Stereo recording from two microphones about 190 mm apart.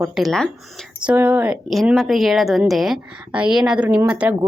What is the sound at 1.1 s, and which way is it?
Speech, 10° right (ahead or behind).